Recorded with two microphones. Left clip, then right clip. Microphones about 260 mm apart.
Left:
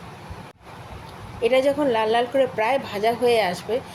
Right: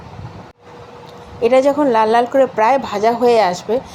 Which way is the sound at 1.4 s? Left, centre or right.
Centre.